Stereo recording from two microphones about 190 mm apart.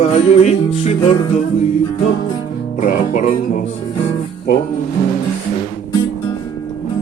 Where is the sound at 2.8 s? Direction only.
45° left (ahead or behind).